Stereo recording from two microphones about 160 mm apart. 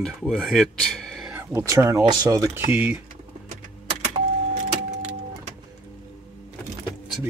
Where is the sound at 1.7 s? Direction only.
15° right (ahead or behind).